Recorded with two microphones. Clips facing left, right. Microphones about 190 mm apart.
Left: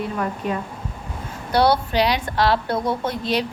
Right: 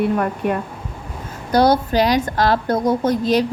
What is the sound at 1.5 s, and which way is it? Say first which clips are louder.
A woman's voice: right 3 dB; 45° right (ahead or behind).